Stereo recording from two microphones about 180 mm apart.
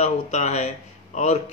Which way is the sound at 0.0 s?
40° left (ahead or behind).